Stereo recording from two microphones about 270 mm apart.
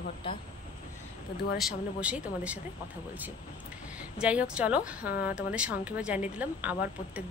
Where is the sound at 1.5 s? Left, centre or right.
Centre.